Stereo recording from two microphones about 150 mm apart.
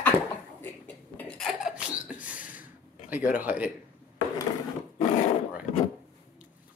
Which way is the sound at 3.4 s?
10° right (ahead or behind).